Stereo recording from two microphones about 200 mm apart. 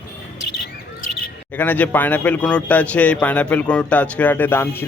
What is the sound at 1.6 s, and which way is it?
A man's voice, 10° left (ahead or behind).